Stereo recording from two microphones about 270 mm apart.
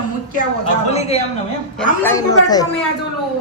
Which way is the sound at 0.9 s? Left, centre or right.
Left.